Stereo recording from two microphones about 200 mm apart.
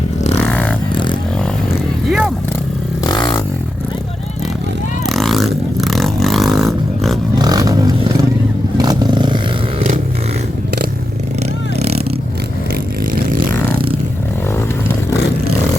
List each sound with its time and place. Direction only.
0.5 s vehicle: 5° left (ahead or behind)
2.0 s vehicle: 5° right (ahead or behind)
3.1 s vehicle: 20° left (ahead or behind)
5.0 s vehicle: centre (ahead or behind)
7.3 s vehicle: 20° right (ahead or behind)